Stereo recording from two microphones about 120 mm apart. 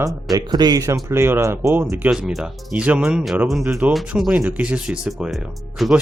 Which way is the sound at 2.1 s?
5° right (ahead or behind).